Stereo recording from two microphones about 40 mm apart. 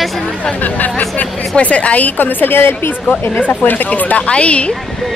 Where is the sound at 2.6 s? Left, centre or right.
Left.